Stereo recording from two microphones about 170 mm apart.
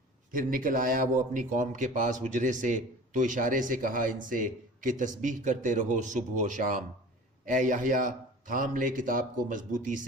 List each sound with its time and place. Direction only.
0.3 s speech: 55° right (ahead or behind)